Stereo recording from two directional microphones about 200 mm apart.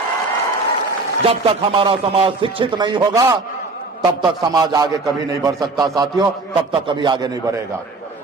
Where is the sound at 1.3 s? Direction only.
25° right (ahead or behind).